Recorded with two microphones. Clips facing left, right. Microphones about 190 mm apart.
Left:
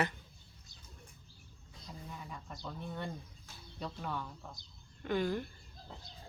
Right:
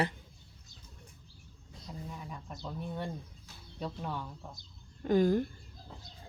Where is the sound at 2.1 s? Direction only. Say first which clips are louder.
Right 2 dB; 10° right (ahead or behind).